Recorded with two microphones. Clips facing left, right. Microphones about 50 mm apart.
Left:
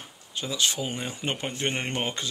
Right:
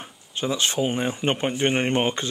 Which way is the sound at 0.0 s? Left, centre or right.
Right.